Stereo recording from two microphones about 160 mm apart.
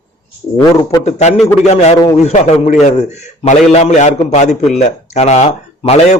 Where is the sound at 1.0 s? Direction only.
45° left (ahead or behind).